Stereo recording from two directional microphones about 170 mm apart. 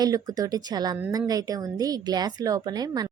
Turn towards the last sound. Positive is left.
turn(degrees=-25)  # may be behind; listen again after turning